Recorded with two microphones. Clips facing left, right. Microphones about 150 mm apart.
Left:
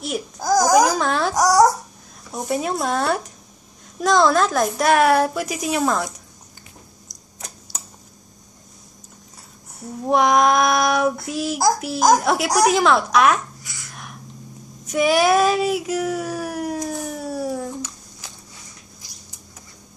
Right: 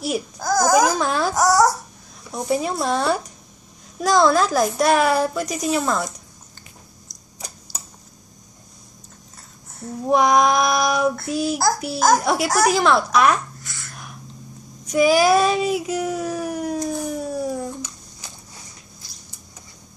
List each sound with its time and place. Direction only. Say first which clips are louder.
0.4 s a child's voice: left 2 dB; 15° left (ahead or behind)
0.9 s a sound: even; centre (ahead or behind)
1.3 s a sound: left 2 dB; 15° left (ahead or behind)
2.3 s speech: right 1 dB; centre (ahead or behind)
7.3 s typewriter: even; centre (ahead or behind)
10.0 s speech: even; centre (ahead or behind)
13.6 s babbling: right 1 dB; 15° left (ahead or behind)
14.9 s child singing: right 1 dB; centre (ahead or behind)
18.9 s a sound: even; 15° left (ahead or behind)